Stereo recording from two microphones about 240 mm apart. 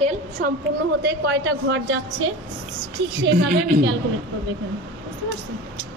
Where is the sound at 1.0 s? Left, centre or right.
Right.